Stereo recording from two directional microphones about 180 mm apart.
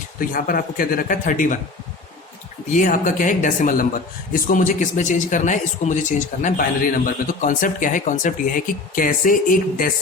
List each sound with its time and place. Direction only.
0.2 s speech: 50° left (ahead or behind)
2.7 s speech: 50° left (ahead or behind)